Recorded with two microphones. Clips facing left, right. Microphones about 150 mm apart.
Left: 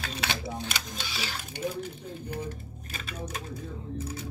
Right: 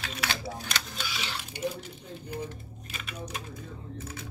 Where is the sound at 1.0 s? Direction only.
35° left (ahead or behind).